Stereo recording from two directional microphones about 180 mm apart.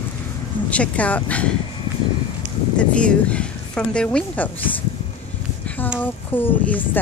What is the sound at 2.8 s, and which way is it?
A woman's voice, 5° left (ahead or behind).